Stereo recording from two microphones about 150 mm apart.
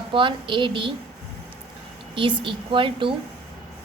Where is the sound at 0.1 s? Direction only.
35° right (ahead or behind).